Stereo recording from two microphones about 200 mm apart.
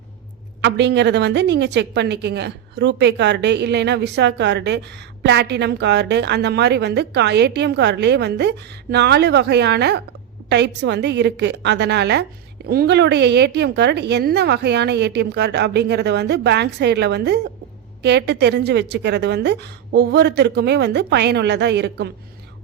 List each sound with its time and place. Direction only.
0.6 s a woman's voice: 60° right (ahead or behind)